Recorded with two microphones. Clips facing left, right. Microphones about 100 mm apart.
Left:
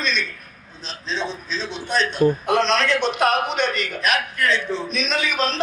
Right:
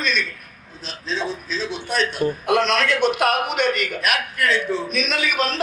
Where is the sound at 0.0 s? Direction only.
50° right (ahead or behind).